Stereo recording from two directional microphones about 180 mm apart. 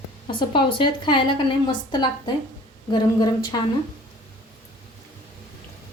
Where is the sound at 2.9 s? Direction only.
25° left (ahead or behind).